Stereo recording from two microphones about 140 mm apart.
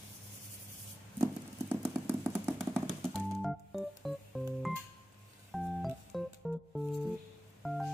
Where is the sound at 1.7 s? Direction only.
15° right (ahead or behind).